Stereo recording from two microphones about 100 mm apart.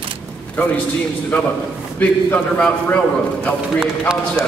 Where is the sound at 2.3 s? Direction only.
15° left (ahead or behind).